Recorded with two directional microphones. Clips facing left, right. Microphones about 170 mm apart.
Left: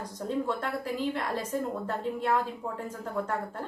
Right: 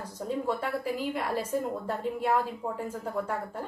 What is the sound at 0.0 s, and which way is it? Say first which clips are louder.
A woman's voice: even; 10° right (ahead or behind).